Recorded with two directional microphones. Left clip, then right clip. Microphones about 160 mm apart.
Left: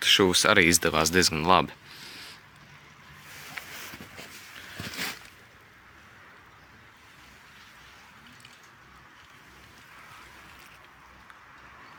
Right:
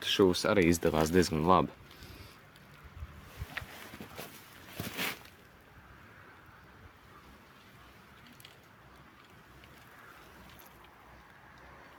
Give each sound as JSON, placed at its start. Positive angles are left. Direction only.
{"t": 0.0, "sound": "speech", "side_deg": 10}
{"t": 0.7, "sound": "speech", "side_deg": -15}